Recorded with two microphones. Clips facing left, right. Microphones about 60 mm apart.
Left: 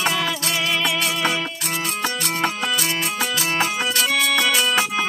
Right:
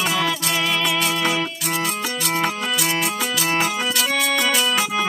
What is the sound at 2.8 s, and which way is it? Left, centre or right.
Music, right.